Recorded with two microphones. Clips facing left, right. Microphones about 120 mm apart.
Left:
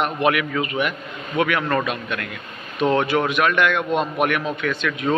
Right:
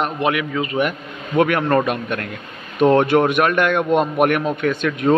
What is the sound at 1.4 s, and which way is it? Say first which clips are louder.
A man's voice: right 5 dB; 45° right (ahead or behind).